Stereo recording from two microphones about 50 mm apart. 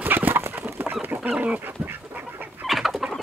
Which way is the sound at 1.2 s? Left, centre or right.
Right.